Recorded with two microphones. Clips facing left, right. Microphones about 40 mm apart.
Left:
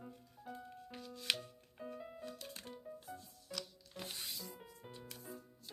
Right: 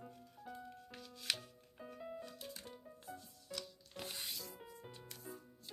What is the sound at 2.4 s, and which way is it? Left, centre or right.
Music, left.